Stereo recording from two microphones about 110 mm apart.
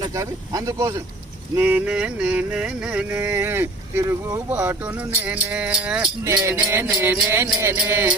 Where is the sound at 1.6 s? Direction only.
15° right (ahead or behind).